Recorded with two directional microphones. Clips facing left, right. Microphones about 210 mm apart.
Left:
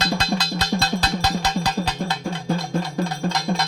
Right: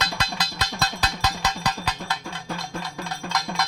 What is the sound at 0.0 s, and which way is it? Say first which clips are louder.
Music: left 7 dB; 30° left (ahead or behind).